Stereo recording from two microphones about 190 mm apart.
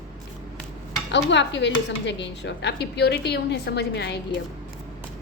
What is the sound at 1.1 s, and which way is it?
A woman's voice, 70° left (ahead or behind).